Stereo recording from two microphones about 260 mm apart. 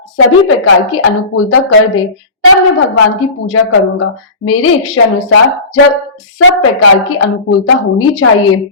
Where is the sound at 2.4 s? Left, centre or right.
Left.